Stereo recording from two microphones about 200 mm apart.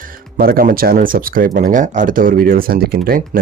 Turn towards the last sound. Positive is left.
turn(degrees=-45)  # may be behind; listen again after turning